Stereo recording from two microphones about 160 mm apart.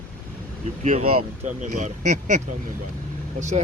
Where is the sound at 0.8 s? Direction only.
50° right (ahead or behind).